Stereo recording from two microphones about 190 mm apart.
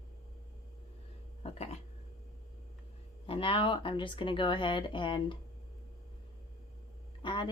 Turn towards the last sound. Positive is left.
turn(degrees=25)  # may be behind; listen again after turning